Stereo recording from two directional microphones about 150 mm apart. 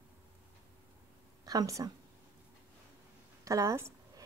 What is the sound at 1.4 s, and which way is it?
Speech, 25° right (ahead or behind).